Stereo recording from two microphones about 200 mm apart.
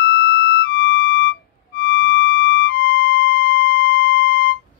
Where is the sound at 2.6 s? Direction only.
50° left (ahead or behind).